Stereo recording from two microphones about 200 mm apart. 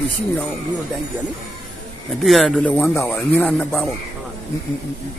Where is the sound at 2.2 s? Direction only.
Centre (ahead or behind).